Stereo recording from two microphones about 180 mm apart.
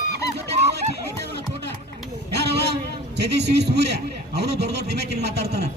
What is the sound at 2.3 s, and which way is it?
Vehicle, 70° right (ahead or behind).